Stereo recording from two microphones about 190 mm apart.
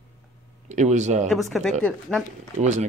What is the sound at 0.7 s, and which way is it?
Speech, 40° right (ahead or behind).